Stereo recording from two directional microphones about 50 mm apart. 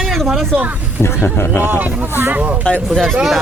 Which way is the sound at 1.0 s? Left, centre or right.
Left.